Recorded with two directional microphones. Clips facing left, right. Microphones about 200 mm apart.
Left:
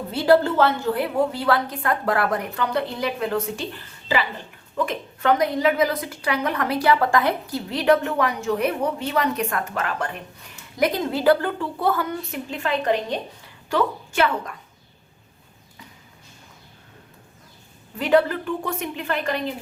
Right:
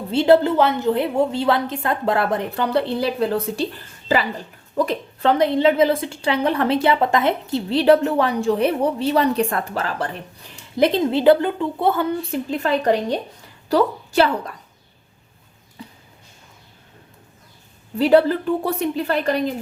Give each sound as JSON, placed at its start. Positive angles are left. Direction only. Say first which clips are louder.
{"t": 0.1, "sound": "a woman's voice", "louder": "right 3 dB", "side_deg": -25}
{"t": 4.8, "sound": "a woman's voice", "louder": "right 4 dB", "side_deg": -30}
{"t": 15.8, "sound": "a sound", "louder": "right 8 dB", "side_deg": -30}
{"t": 17.9, "sound": "a woman's voice", "louder": "right 4 dB", "side_deg": -35}